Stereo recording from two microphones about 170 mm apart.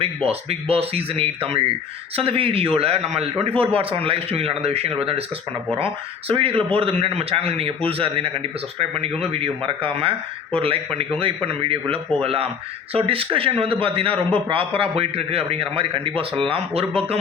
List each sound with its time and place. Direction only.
0.0 s a man's voice: 35° right (ahead or behind)